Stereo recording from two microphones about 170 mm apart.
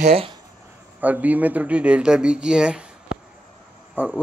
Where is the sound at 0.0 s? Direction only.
35° right (ahead or behind).